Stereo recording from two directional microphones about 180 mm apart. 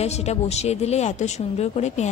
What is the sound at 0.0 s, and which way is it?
A woman's voice, 35° left (ahead or behind).